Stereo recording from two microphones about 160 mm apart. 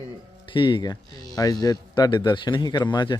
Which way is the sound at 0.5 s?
30° left (ahead or behind).